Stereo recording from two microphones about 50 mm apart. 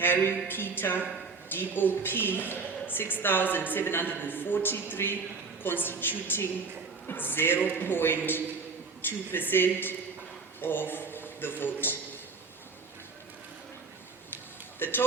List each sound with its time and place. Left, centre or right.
0.0 s a woman's voice: left
14.8 s a woman's voice: left